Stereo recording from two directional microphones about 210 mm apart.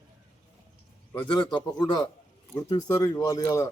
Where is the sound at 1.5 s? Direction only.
20° left (ahead or behind).